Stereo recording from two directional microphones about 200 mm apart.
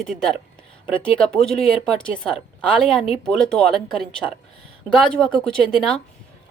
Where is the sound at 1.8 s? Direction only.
5° left (ahead or behind).